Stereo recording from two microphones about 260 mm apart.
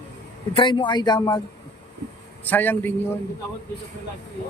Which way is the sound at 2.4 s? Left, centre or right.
Centre.